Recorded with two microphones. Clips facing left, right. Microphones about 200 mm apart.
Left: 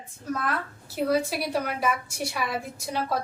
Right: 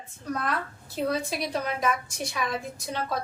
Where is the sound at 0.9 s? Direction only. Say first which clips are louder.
Left 3 dB; 5° left (ahead or behind).